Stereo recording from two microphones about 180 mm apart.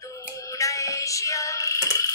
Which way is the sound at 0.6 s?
15° left (ahead or behind).